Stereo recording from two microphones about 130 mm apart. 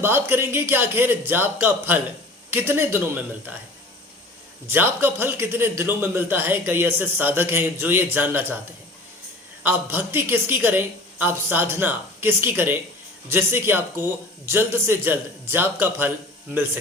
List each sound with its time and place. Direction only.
0.0 s a man's voice: 15° right (ahead or behind)
4.7 s a man's voice: 15° right (ahead or behind)
9.6 s a man's voice: 15° right (ahead or behind)